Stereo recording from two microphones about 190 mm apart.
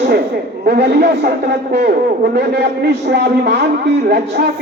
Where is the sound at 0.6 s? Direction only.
60° right (ahead or behind).